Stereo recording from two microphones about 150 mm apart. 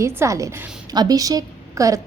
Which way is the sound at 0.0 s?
20° right (ahead or behind).